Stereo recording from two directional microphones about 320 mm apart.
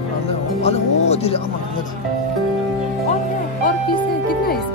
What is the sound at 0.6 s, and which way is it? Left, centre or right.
Music, centre.